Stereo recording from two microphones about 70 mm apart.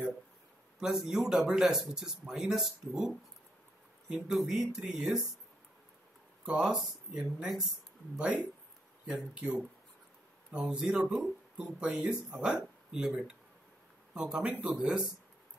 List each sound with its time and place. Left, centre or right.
0.7 s speech: centre
6.4 s speech: centre